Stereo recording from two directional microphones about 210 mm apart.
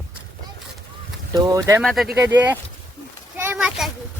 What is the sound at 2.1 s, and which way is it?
Speech, 15° right (ahead or behind).